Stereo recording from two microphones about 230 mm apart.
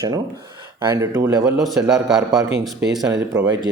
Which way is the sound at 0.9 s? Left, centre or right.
Centre.